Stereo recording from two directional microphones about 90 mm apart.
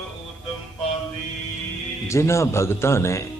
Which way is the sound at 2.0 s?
30° left (ahead or behind).